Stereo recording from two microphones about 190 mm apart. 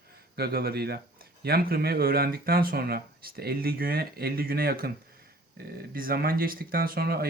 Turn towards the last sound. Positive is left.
turn(degrees=-55)  # may be behind; listen again after turning